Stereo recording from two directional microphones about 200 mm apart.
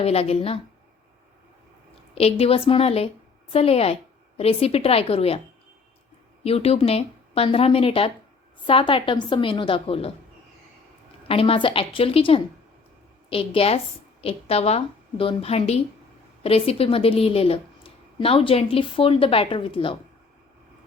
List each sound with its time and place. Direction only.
0.0 s speech: 30° left (ahead or behind)
2.1 s speech: 30° left (ahead or behind)
6.4 s speech: 30° left (ahead or behind)
11.3 s speech: 25° left (ahead or behind)